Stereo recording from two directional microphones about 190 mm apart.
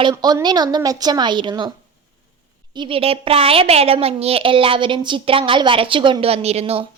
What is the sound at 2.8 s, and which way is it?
A woman's voice, 30° right (ahead or behind).